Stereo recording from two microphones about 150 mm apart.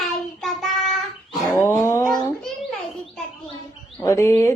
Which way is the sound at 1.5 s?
15° left (ahead or behind).